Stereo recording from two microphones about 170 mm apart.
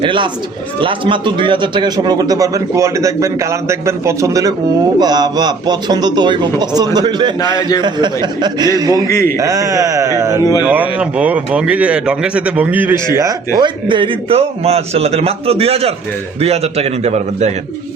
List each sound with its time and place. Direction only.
0.0 s a man's voice: 30° right (ahead or behind)
7.4 s a man's voice: 25° left (ahead or behind)
7.8 s a man's voice: 25° right (ahead or behind)
9.0 s a man's voice: 15° left (ahead or behind)
9.4 s speech: 20° right (ahead or behind)
13.1 s a man's voice: 25° right (ahead or behind); by 17.5 s 40° right (ahead or behind)